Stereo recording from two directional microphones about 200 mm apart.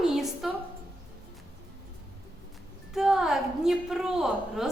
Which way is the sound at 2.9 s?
Centre (ahead or behind).